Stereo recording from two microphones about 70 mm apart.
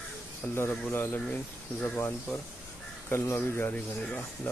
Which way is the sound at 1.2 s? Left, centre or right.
Left.